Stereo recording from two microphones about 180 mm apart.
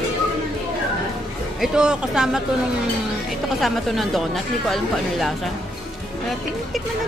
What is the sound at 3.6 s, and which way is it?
Speech, centre (ahead or behind).